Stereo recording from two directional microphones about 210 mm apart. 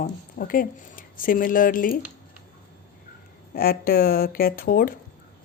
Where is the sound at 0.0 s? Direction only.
40° left (ahead or behind).